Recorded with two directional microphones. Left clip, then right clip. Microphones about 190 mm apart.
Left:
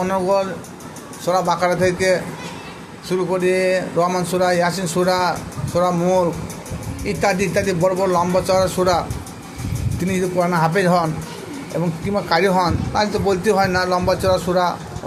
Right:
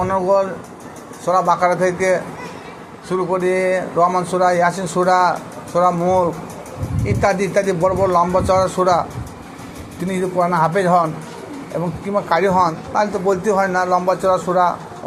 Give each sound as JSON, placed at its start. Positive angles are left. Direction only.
{"t": 0.0, "sound": "a man's voice", "side_deg": 15}
{"t": 10.1, "sound": "a man's voice", "side_deg": 15}